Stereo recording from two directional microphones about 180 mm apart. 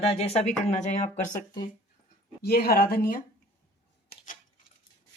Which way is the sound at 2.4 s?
60° left (ahead or behind).